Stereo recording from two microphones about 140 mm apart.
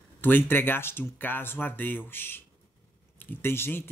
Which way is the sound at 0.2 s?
15° left (ahead or behind).